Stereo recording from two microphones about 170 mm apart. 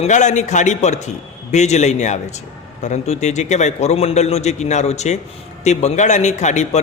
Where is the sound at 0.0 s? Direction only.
45° left (ahead or behind).